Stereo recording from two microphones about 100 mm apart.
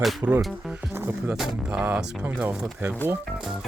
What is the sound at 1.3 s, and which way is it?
Speech, 10° right (ahead or behind).